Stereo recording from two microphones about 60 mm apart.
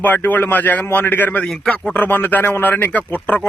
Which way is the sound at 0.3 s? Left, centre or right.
Left.